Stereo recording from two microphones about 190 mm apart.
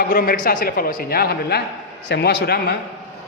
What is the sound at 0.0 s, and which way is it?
A man's voice, 50° left (ahead or behind).